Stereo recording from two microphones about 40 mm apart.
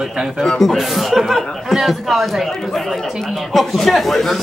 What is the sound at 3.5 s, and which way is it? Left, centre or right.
Speech, centre.